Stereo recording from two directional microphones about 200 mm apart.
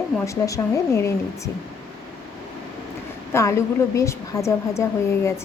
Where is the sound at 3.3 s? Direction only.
15° left (ahead or behind).